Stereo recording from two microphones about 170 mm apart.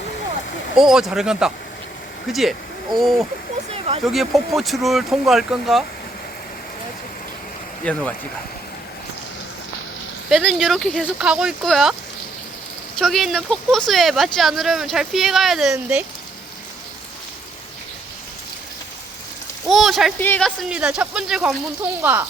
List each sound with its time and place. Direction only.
0.8 s speech: 5° right (ahead or behind)
3.7 s speech: 35° right (ahead or behind)
4.0 s speech: centre (ahead or behind)
7.9 s speech: 5° left (ahead or behind)
10.2 s speech: centre (ahead or behind)
13.0 s speech: centre (ahead or behind)
19.6 s speech: centre (ahead or behind)
20.1 s speech: 10° left (ahead or behind)